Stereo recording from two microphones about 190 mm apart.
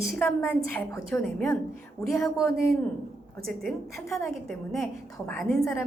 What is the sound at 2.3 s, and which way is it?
Speech, 15° left (ahead or behind).